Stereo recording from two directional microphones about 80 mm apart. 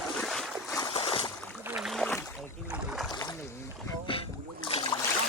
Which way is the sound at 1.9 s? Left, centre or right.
Centre.